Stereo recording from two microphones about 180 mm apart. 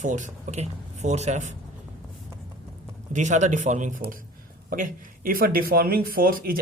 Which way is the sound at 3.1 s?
40° right (ahead or behind).